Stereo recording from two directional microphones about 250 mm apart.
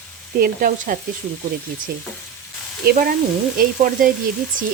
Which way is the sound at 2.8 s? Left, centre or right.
Right.